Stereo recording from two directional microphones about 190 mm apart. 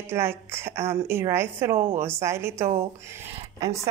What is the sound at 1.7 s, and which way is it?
Speech, 40° right (ahead or behind).